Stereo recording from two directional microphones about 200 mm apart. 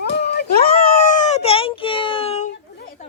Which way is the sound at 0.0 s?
55° left (ahead or behind).